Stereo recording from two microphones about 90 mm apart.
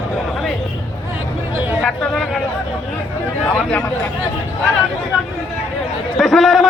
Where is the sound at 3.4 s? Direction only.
15° left (ahead or behind).